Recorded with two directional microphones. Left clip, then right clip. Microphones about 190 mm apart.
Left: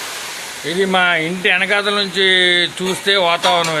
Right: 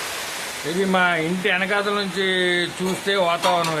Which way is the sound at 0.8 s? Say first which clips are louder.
Left 5 dB; 10° left (ahead or behind).